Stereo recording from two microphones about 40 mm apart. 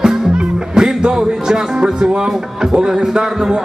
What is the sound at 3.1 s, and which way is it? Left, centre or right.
Speech, centre.